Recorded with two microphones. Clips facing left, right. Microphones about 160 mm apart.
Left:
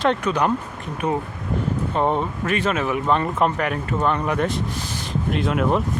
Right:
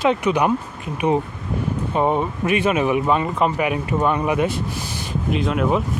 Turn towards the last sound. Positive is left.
turn(degrees=0)  # may be behind; listen again after turning